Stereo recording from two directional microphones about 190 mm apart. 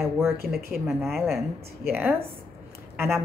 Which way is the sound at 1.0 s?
Centre (ahead or behind).